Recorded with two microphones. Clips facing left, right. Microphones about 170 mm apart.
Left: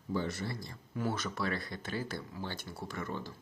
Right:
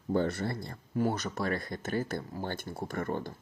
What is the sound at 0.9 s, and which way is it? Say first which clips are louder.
Speech: right 5 dB; 40° right (ahead or behind).